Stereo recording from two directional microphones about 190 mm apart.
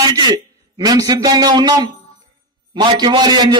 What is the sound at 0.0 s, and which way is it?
A man's voice, 20° right (ahead or behind).